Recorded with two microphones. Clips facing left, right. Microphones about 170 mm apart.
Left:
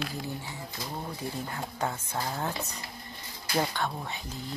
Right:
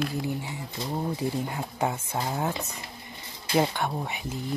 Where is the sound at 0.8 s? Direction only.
20° right (ahead or behind).